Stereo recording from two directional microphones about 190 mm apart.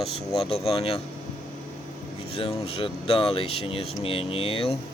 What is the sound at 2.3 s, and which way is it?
Speech, 30° left (ahead or behind).